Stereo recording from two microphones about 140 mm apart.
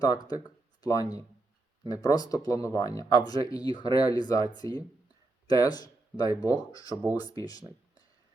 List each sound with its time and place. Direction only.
0.0 s speech: 30° left (ahead or behind)